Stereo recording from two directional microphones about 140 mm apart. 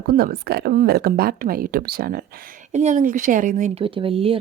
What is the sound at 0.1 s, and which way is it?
A woman's voice, 90° right.